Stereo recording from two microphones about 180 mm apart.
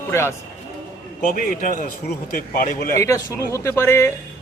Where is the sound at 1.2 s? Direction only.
50° left (ahead or behind).